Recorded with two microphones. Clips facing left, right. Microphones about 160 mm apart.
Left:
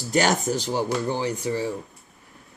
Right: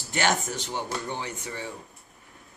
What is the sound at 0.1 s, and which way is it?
Speech, 40° left (ahead or behind).